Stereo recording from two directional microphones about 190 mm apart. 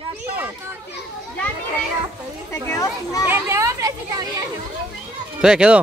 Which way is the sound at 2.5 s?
15° left (ahead or behind).